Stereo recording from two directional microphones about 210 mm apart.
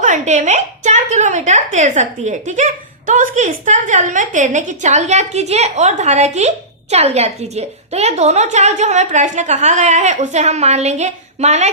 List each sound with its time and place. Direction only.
0.0 s a woman's voice: 35° right (ahead or behind)